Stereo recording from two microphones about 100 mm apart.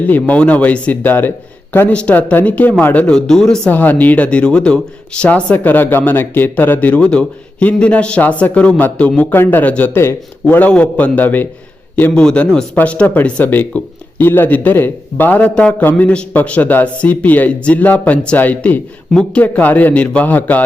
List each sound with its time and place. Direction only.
0.1 s speech: 15° left (ahead or behind)
3.7 s speech: 15° left (ahead or behind)
10.4 s speech: 15° left (ahead or behind)